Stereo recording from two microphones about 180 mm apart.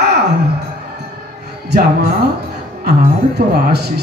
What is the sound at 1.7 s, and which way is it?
Speech, 65° right (ahead or behind).